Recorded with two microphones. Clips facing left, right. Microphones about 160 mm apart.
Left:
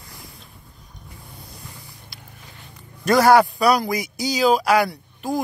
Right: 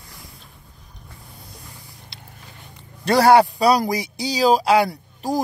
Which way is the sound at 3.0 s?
30° right (ahead or behind).